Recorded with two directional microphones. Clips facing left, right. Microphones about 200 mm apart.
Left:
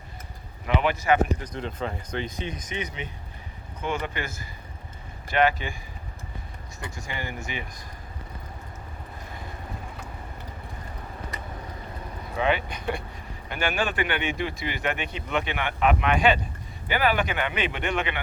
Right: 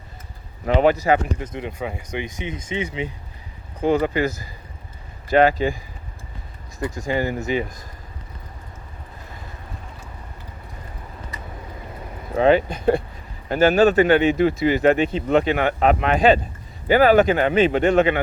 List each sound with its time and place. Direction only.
0.6 s speech: 40° right (ahead or behind)
1.4 s speech: 15° right (ahead or behind); by 5.7 s 35° right (ahead or behind)
7.1 s speech: 40° right (ahead or behind)
12.4 s speech: 40° right (ahead or behind)